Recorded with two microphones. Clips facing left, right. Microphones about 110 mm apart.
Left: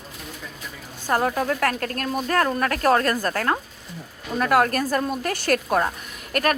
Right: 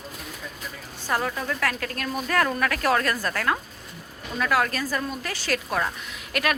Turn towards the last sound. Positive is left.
turn(degrees=45)  # may be behind; listen again after turning